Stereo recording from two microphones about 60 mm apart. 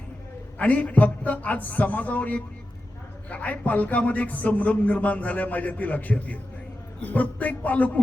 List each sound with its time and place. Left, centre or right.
0.6 s speech: left